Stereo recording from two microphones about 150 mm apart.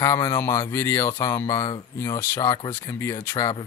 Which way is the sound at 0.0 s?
20° left (ahead or behind).